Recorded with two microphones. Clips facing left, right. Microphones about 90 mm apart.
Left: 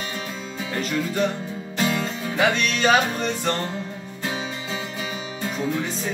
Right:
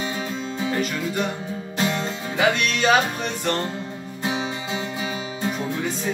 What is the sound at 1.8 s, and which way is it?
Music, 30° right (ahead or behind).